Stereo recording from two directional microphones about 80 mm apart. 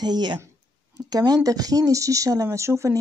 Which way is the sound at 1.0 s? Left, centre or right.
Right.